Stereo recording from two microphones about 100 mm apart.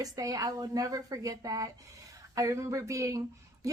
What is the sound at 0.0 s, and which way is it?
A woman's voice, 35° right (ahead or behind).